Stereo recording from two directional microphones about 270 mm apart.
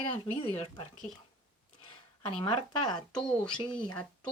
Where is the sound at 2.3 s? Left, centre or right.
Centre.